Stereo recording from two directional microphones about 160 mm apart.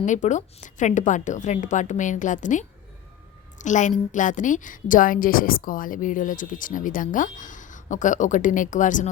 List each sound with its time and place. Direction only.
0.0 s a woman's voice: 50° left (ahead or behind)